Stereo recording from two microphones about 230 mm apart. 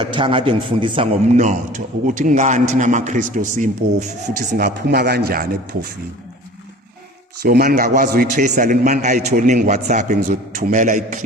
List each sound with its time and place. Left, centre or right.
0.1 s a man's voice: right
7.4 s a man's voice: right